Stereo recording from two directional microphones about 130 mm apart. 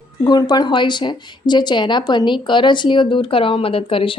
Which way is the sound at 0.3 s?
30° left (ahead or behind).